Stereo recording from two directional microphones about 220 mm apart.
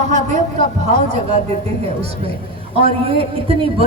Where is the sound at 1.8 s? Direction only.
25° right (ahead or behind).